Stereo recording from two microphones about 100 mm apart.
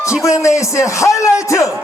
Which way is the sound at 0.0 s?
30° left (ahead or behind).